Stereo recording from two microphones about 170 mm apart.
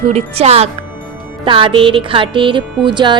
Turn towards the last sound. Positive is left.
turn(degrees=-25)  # may be behind; listen again after turning